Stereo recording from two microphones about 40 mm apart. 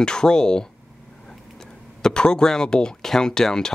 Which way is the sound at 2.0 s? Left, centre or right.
Centre.